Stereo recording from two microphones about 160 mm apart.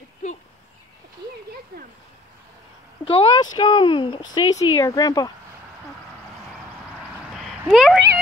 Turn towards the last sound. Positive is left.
turn(degrees=0)  # may be behind; listen again after turning